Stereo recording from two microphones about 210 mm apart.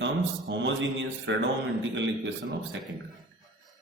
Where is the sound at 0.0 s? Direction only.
60° right (ahead or behind).